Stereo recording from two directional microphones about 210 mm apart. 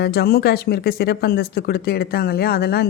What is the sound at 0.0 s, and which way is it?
Speech, 50° left (ahead or behind).